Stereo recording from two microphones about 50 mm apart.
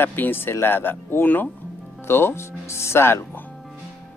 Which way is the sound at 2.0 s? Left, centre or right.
Left.